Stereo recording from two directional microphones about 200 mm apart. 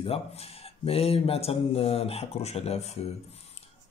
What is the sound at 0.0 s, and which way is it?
A man's voice, 30° left (ahead or behind).